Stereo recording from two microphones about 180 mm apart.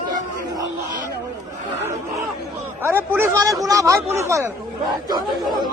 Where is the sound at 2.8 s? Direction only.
15° right (ahead or behind).